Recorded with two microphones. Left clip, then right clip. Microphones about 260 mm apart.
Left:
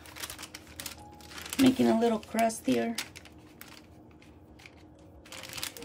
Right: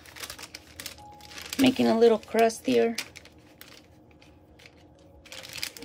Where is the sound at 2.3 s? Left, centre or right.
Right.